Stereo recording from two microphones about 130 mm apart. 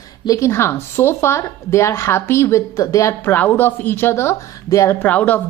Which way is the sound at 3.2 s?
15° left (ahead or behind).